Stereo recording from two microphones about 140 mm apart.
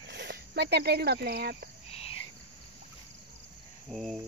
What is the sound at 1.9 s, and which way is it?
Cricket, 45° left (ahead or behind).